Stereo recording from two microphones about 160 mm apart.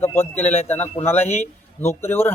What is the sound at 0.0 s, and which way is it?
A man's voice, 15° left (ahead or behind).